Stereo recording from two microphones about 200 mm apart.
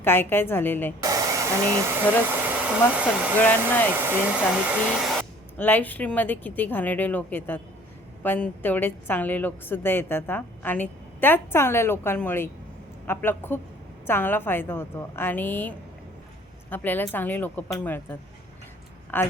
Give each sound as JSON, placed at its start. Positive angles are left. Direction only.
{"t": 0.0, "sound": "a woman's voice", "side_deg": 10}
{"t": 1.0, "sound": "speech", "side_deg": -15}
{"t": 2.9, "sound": "hair dryer", "side_deg": -5}
{"t": 3.3, "sound": "a woman's voice", "side_deg": 10}
{"t": 4.0, "sound": "hair dryer", "side_deg": -5}
{"t": 5.5, "sound": "a woman's voice", "side_deg": 10}